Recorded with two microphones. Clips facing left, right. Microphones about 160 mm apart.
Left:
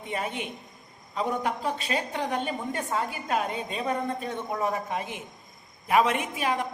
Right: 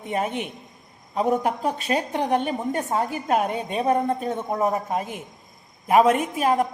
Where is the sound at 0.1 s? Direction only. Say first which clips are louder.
Right 6 dB; 50° right (ahead or behind).